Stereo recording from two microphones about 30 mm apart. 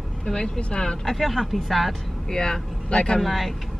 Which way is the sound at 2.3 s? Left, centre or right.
Left.